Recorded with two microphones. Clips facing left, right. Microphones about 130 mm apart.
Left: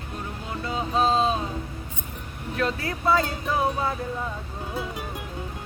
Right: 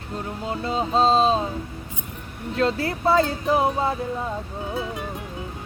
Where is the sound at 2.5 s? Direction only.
30° right (ahead or behind).